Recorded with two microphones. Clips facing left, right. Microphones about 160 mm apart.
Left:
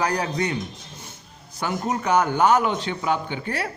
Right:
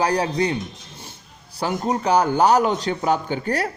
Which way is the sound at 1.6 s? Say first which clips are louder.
Right 3 dB; 35° right (ahead or behind).